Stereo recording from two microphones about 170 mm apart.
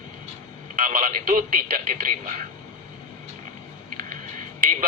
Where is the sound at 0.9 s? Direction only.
50° right (ahead or behind).